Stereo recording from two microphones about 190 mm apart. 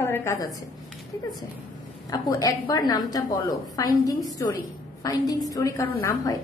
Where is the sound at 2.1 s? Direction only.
20° left (ahead or behind).